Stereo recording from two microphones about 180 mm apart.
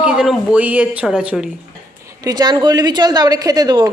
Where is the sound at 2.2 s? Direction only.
20° right (ahead or behind).